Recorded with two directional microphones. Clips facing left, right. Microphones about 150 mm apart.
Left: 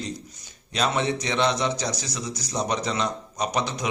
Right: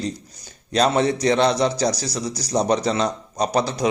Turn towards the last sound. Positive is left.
turn(degrees=-35)  # may be behind; listen again after turning